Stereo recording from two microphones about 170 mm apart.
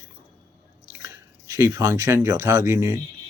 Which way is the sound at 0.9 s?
15° right (ahead or behind).